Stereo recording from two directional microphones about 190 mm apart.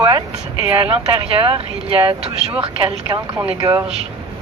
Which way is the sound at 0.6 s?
15° right (ahead or behind).